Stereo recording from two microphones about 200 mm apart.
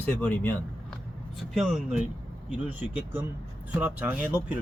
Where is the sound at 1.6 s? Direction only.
Centre (ahead or behind).